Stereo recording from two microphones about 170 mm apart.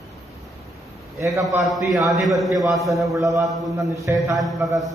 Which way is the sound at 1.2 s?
20° right (ahead or behind).